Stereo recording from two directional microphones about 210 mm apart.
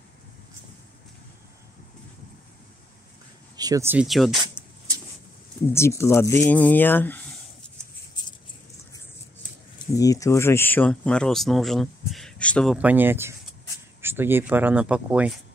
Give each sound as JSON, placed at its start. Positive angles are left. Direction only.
{"t": 3.5, "sound": "speech", "side_deg": -15}
{"t": 5.7, "sound": "speech", "side_deg": 10}
{"t": 8.2, "sound": "a sound", "side_deg": 20}
{"t": 9.8, "sound": "speech", "side_deg": 15}
{"t": 12.7, "sound": "speech", "side_deg": -10}